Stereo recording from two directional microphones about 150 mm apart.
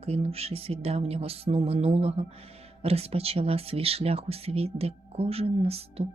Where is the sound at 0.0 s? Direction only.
45° right (ahead or behind).